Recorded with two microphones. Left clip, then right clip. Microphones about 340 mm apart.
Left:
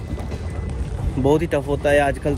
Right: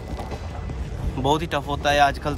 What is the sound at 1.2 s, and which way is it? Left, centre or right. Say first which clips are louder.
Speech: left 4 dB; centre.